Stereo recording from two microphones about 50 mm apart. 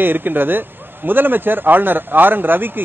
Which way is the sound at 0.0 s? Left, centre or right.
Right.